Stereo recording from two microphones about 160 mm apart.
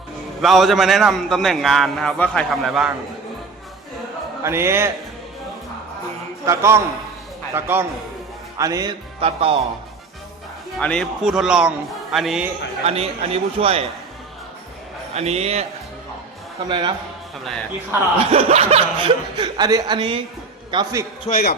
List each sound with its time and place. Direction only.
0.4 s a man's voice: centre (ahead or behind)
4.4 s a man's voice: 15° right (ahead or behind)
6.4 s a man's voice: 15° right (ahead or behind)
9.2 s speech: 35° right (ahead or behind)
10.8 s a man's voice: 5° left (ahead or behind)
12.8 s speech: 40° right (ahead or behind)
15.1 s speech: 40° right (ahead or behind)
16.6 s a man's voice: 30° right (ahead or behind)
18.3 s a man's voice: 40° right (ahead or behind)
21.2 s a man's voice: 60° left (ahead or behind)